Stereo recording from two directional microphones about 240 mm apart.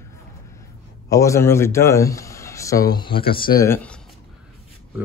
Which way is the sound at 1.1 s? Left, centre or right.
Centre.